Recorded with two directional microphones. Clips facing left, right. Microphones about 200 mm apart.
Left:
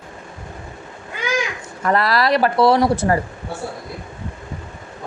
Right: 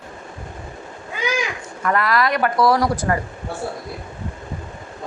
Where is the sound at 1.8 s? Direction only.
35° left (ahead or behind).